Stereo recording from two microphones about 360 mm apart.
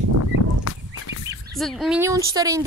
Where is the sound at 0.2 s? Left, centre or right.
Left.